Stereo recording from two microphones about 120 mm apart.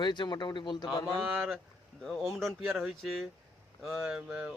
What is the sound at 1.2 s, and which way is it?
Speech, 15° right (ahead or behind).